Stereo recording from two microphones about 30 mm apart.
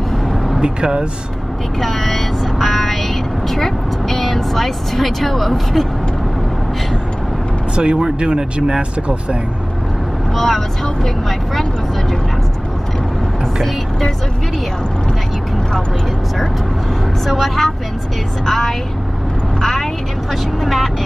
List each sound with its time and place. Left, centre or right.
0.6 s speech: right
1.8 s speech: centre
7.7 s speech: right
10.3 s speech: centre
17.3 s speech: centre
20.6 s speech: centre